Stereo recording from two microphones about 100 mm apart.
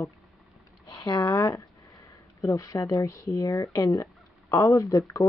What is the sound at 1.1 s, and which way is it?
Speech, 35° left (ahead or behind).